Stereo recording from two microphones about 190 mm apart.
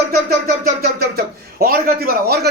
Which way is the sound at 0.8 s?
55° right (ahead or behind).